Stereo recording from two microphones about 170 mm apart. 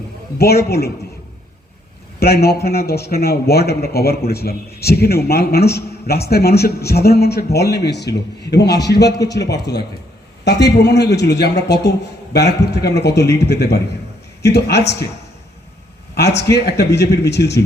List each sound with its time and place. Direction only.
0.3 s a man's voice: 65° left (ahead or behind)
2.1 s a man's voice: 65° left (ahead or behind)
16.4 s a man's voice: 75° left (ahead or behind)